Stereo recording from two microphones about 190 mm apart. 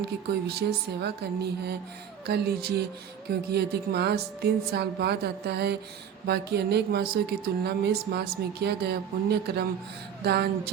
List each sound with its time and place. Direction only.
0.3 s speech: 55° right (ahead or behind)